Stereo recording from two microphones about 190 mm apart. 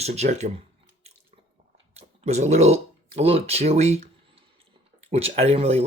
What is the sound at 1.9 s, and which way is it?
Speech, 35° right (ahead or behind).